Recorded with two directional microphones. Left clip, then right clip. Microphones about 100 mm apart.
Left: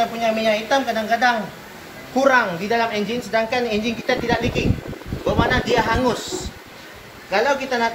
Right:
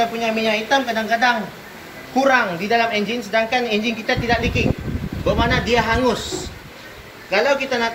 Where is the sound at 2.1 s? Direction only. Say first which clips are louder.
Even; 65° left (ahead or behind).